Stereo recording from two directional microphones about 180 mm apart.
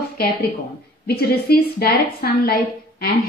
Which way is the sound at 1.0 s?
60° left (ahead or behind).